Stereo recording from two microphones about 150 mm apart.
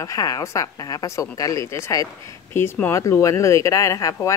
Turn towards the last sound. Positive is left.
turn(degrees=20)  # may be behind; listen again after turning